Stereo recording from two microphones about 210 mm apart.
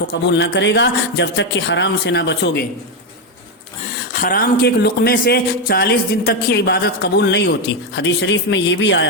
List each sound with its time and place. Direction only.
0.1 s speech: 55° left (ahead or behind)
4.1 s speech: 40° left (ahead or behind); by 9.0 s 60° left (ahead or behind)